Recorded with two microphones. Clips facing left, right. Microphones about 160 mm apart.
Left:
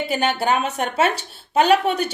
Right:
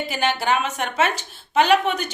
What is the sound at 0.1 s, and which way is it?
Speech, 35° left (ahead or behind).